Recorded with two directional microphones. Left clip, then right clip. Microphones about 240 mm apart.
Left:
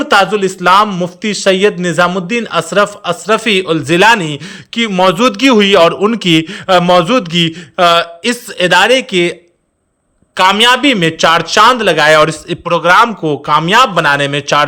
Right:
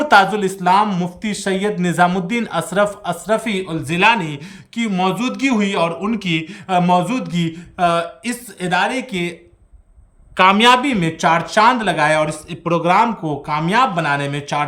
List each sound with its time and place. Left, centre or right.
0.0 s a man's voice: centre
10.3 s a man's voice: centre